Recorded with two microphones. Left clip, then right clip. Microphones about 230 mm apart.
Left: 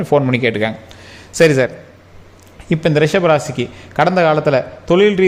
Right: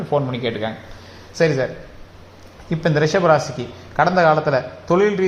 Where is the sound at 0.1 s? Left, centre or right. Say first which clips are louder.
Left 7 dB; left.